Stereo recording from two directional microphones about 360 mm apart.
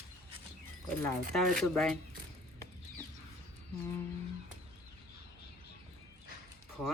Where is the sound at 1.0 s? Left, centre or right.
Centre.